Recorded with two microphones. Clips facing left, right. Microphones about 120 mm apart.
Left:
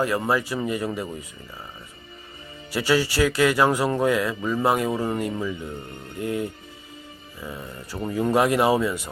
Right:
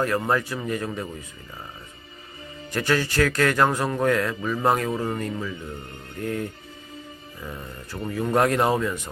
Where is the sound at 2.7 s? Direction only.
10° left (ahead or behind).